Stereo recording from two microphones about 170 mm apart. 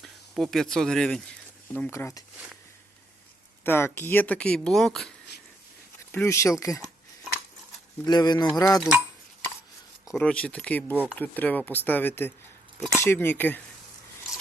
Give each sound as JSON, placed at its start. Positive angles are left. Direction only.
{"t": 0.0, "sound": "speech", "side_deg": 0}
{"t": 3.6, "sound": "speech", "side_deg": 15}
{"t": 6.1, "sound": "speech", "side_deg": 15}
{"t": 8.0, "sound": "speech", "side_deg": 25}
{"t": 10.1, "sound": "speech", "side_deg": 5}